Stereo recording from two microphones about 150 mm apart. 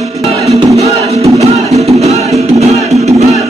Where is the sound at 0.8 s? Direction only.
45° right (ahead or behind).